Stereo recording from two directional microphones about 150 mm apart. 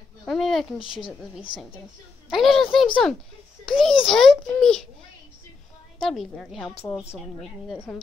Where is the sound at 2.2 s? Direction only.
Centre (ahead or behind).